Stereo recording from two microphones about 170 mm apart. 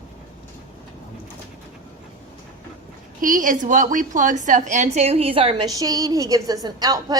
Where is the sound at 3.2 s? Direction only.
50° right (ahead or behind).